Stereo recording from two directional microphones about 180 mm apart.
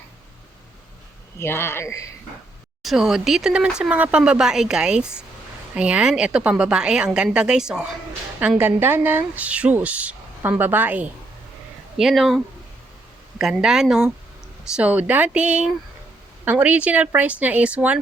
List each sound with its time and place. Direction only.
1.4 s speech: 15° left (ahead or behind)
2.8 s speech: centre (ahead or behind)
13.4 s speech: 5° right (ahead or behind)